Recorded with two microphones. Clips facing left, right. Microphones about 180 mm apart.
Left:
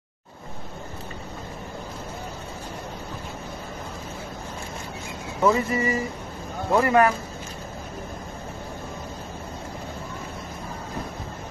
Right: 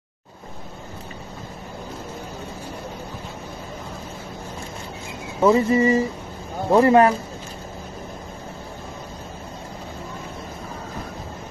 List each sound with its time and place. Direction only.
5.5 s speech: 25° right (ahead or behind)